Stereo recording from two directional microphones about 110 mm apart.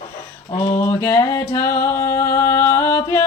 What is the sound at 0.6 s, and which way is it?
Music, 25° left (ahead or behind).